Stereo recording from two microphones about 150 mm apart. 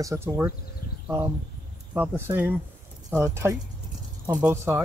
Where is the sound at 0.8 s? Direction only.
70° left (ahead or behind).